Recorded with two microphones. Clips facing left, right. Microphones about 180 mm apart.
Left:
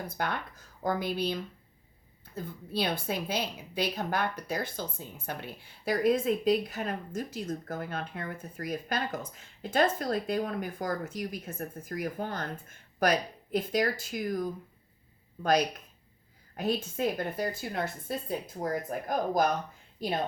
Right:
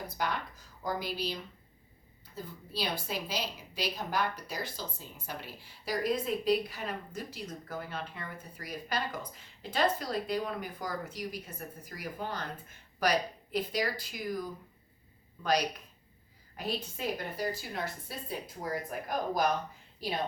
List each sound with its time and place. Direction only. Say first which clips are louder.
0.2 s a woman's voice: even; 55° left (ahead or behind)
16.6 s speech: left 6 dB; 50° left (ahead or behind)